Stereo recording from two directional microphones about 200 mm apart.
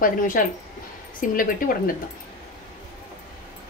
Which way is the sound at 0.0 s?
45° left (ahead or behind).